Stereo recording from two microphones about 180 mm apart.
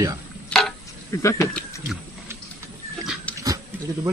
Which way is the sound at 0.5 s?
Centre (ahead or behind).